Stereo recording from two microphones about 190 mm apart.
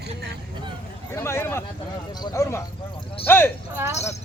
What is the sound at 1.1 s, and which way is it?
Speech, 15° left (ahead or behind).